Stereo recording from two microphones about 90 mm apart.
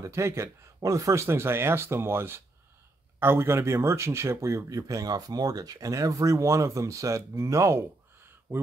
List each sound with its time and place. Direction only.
0.0 s speech: 35° right (ahead or behind)